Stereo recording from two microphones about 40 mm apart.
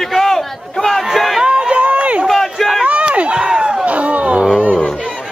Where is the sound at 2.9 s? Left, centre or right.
Right.